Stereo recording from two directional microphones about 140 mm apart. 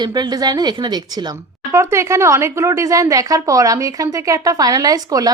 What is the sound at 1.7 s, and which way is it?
Speech, 20° right (ahead or behind).